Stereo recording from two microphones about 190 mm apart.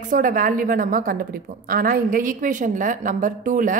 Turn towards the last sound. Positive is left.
turn(degrees=-45)  # may be behind; listen again after turning